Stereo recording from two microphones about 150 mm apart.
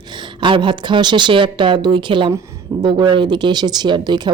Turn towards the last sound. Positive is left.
turn(degrees=-30)  # may be behind; listen again after turning